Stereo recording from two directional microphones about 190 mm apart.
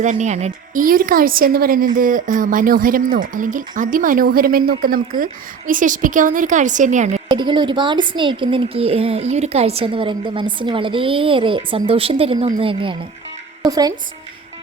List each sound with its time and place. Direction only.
0.0 s speech: 40° right (ahead or behind)
7.3 s speech: 25° right (ahead or behind)